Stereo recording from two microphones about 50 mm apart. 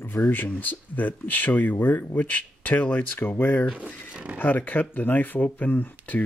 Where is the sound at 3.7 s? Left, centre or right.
Right.